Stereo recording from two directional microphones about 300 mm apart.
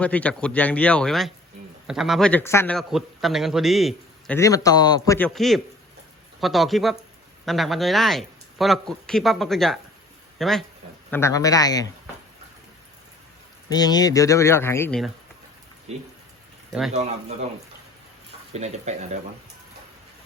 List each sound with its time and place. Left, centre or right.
0.0 s a man's voice: centre
4.4 s a man's voice: centre
13.7 s speech: centre
16.9 s speech: right
18.5 s speech: right